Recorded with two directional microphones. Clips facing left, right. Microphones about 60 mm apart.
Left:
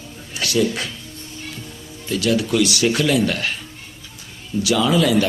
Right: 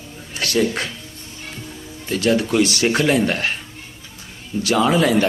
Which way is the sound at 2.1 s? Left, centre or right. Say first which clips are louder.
Right 1 dB; right.